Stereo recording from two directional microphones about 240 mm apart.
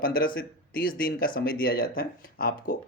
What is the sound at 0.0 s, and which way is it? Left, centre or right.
Speech, left.